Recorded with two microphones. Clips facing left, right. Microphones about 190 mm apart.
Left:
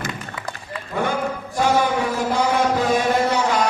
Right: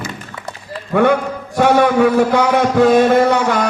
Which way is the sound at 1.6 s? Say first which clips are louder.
Right 8 dB; 65° right (ahead or behind).